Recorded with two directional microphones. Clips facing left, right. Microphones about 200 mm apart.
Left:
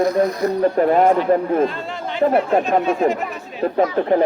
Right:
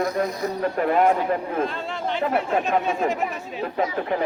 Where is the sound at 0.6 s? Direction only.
40° left (ahead or behind).